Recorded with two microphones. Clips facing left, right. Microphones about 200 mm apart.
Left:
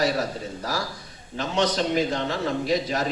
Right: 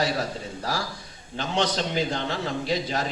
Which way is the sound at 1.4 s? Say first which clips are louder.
Left 2 dB; 30° right (ahead or behind).